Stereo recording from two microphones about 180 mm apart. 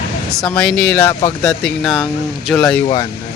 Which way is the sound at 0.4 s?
5° left (ahead or behind).